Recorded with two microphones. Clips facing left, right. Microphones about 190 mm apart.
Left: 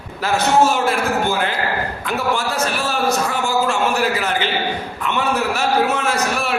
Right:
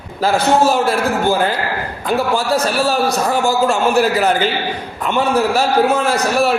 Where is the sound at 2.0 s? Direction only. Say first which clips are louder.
Right 6 dB; 35° right (ahead or behind).